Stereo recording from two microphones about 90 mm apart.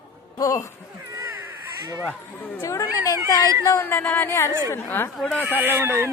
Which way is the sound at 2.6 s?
40° left (ahead or behind).